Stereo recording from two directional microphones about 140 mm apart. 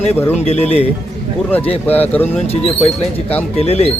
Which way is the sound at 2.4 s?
45° left (ahead or behind).